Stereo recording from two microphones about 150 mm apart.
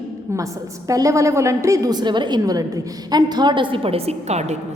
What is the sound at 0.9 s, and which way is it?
A woman's voice, 20° right (ahead or behind).